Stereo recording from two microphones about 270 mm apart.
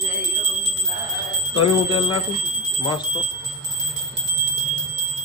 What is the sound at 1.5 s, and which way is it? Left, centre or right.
Speech, centre.